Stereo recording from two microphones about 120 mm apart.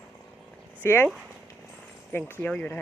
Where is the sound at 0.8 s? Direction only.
15° left (ahead or behind).